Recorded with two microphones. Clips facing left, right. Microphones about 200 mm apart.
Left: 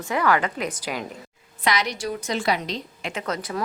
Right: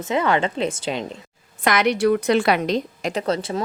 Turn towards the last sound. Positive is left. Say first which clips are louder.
# right 6 dB
turn(degrees=-30)  # may be behind; listen again after turning